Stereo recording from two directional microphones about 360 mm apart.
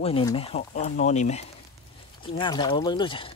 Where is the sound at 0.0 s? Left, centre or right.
Centre.